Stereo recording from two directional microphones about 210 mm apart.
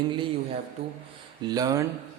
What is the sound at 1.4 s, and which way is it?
Speech, 20° right (ahead or behind).